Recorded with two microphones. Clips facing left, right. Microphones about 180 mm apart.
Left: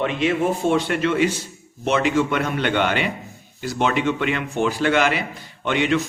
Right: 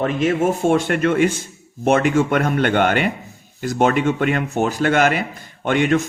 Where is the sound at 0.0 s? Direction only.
45° right (ahead or behind).